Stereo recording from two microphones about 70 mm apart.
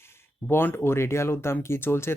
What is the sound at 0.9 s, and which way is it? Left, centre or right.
Speech, left.